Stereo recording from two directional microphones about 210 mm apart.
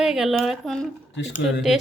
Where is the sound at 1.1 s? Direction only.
60° left (ahead or behind).